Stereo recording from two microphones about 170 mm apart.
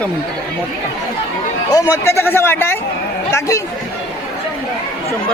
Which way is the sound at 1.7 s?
20° left (ahead or behind).